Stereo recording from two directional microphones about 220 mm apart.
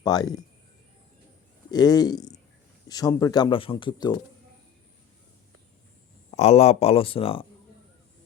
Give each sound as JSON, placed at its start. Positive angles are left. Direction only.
{"t": 0.0, "sound": "speech", "side_deg": 15}
{"t": 1.7, "sound": "speech", "side_deg": 15}
{"t": 6.3, "sound": "speech", "side_deg": 30}